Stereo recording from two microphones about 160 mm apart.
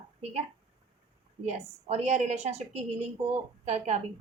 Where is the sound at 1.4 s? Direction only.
45° right (ahead or behind).